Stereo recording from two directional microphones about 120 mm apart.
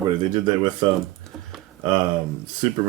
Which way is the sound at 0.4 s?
35° right (ahead or behind).